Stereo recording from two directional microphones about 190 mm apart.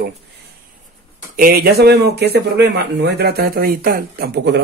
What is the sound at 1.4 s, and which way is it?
Speech, 50° right (ahead or behind).